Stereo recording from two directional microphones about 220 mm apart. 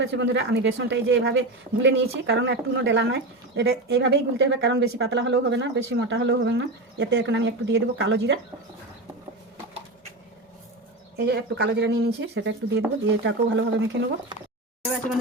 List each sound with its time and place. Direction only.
0.0 s speech: 55° right (ahead or behind)
11.3 s speech: 45° right (ahead or behind)